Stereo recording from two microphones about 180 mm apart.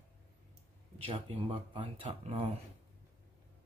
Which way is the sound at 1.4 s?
30° right (ahead or behind).